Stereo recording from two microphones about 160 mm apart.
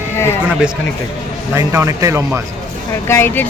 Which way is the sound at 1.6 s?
20° right (ahead or behind).